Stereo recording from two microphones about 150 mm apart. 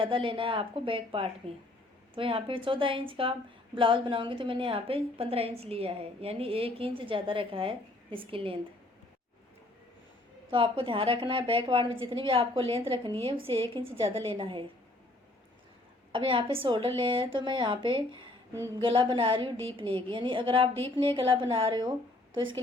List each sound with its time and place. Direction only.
0.0 s a woman's voice: 35° right (ahead or behind)
10.5 s a woman's voice: 35° right (ahead or behind)
16.1 s a woman's voice: 35° right (ahead or behind)
18.5 s a woman's voice: 20° right (ahead or behind)
18.8 s a woman's voice: 35° right (ahead or behind)